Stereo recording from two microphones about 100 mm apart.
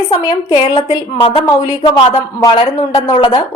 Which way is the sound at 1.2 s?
65° left (ahead or behind).